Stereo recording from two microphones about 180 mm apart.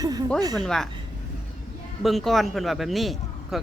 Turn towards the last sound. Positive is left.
turn(degrees=0)  # may be behind; listen again after turning